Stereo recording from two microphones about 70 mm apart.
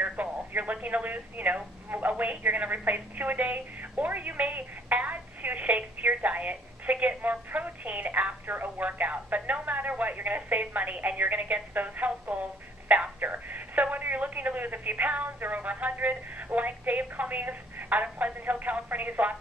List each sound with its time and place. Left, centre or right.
0.0 s speech: right